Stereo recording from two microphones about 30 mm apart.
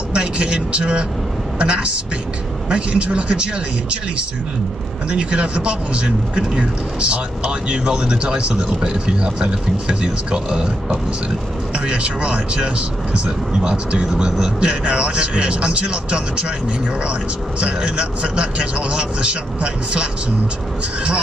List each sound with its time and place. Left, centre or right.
0.1 s speech: right
5.1 s speech: right
11.8 s speech: right
17.6 s speech: right